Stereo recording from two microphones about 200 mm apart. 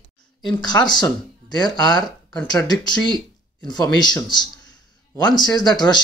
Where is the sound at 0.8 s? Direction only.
20° left (ahead or behind).